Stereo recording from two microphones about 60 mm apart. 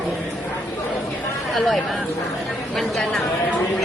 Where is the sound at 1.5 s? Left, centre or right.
Centre.